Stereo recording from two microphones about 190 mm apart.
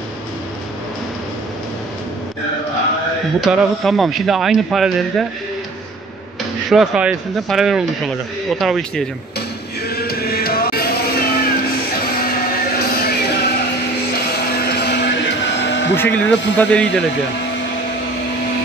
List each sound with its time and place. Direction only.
3.3 s a man's voice: centre (ahead or behind)
6.7 s a man's voice: centre (ahead or behind)
9.8 s music: 55° left (ahead or behind)
14.1 s a sound: 55° left (ahead or behind)
15.9 s a man's voice: 10° left (ahead or behind)